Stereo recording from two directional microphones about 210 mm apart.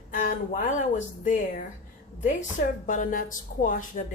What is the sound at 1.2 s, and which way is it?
Speech, 35° left (ahead or behind).